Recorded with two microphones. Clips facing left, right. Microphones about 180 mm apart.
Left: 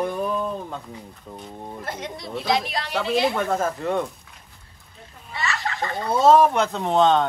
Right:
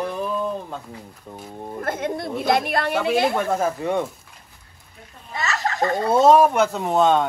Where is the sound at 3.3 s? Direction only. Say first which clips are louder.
Right 2 dB; centre (ahead or behind).